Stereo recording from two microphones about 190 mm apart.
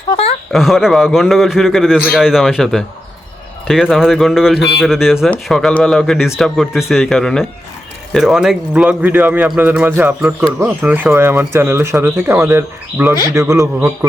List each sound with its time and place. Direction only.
0.5 s speech: centre (ahead or behind)